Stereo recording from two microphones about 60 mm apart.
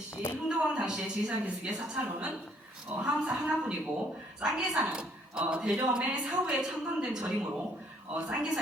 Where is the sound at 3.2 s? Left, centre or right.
Centre.